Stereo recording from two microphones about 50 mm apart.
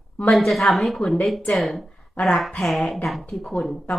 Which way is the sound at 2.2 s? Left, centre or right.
Left.